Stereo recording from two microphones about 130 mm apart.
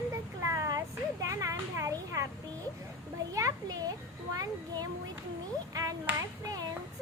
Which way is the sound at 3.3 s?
25° right (ahead or behind).